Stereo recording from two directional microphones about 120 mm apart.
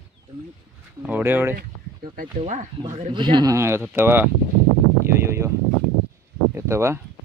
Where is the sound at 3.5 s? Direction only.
20° right (ahead or behind).